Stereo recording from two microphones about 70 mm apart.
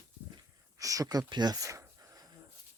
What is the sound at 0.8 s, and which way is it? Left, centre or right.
Speech, right.